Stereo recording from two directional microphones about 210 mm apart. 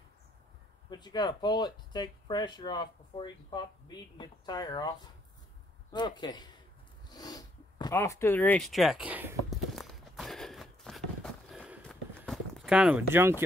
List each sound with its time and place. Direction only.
0.8 s speech: 20° left (ahead or behind); by 9.6 s 10° right (ahead or behind)
9.8 s walk: centre (ahead or behind)
11.4 s clip-clop: 5° right (ahead or behind)